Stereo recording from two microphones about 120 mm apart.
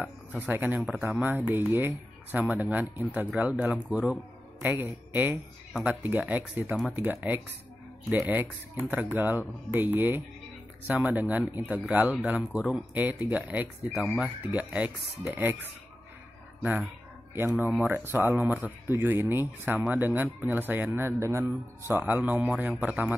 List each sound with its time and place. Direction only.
0.0 s speech: 15° right (ahead or behind)
17.3 s speech: 15° right (ahead or behind)